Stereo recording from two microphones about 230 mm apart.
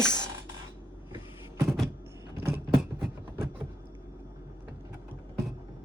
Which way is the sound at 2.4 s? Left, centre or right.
Centre.